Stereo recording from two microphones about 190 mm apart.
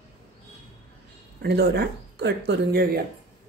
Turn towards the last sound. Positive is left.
turn(degrees=-55)  # may be behind; listen again after turning